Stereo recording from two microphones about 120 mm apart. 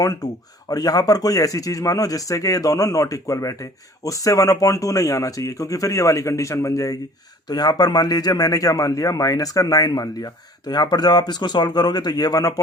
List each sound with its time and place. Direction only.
0.0 s speech: 30° left (ahead or behind)